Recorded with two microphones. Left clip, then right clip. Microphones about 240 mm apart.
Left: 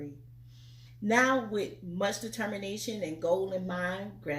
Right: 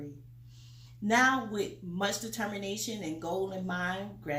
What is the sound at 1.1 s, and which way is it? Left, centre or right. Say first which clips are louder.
Speech: even; centre.